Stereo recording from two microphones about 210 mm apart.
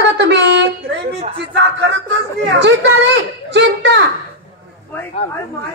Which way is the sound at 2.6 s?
55° right (ahead or behind).